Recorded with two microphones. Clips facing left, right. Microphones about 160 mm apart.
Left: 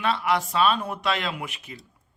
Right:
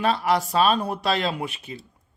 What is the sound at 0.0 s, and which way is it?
Speech, 40° right (ahead or behind).